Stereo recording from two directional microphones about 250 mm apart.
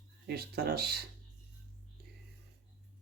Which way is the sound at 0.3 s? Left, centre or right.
Right.